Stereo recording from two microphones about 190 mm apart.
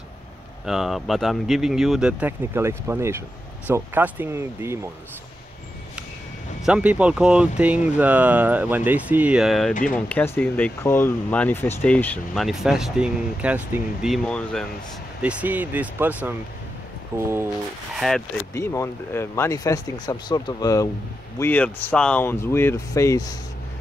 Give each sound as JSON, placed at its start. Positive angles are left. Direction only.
{"t": 0.7, "sound": "speech", "side_deg": 0}
{"t": 6.6, "sound": "speech", "side_deg": -5}
{"t": 15.2, "sound": "speech", "side_deg": -10}
{"t": 17.9, "sound": "speech", "side_deg": 0}
{"t": 18.5, "sound": "speech", "side_deg": 15}